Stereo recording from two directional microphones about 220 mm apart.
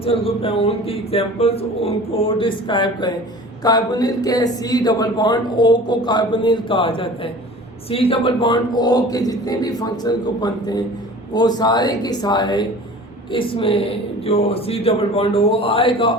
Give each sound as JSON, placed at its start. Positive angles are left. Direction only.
{"t": 0.0, "sound": "a man's voice", "side_deg": 25}